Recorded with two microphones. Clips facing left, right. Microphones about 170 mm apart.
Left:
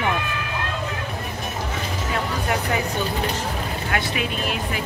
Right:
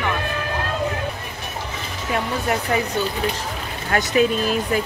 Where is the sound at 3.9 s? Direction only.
40° right (ahead or behind).